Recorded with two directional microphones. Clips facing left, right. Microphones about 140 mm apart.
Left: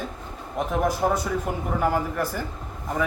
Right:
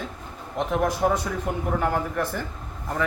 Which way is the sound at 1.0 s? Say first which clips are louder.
Even; 10° left (ahead or behind).